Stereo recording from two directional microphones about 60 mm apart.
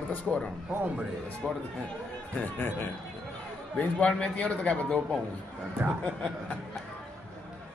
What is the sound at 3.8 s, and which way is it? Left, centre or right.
A man's voice, centre.